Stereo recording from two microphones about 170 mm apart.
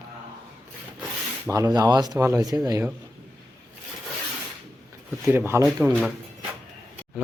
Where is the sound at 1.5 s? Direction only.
20° right (ahead or behind).